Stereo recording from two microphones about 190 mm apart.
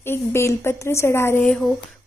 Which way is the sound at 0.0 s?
15° left (ahead or behind).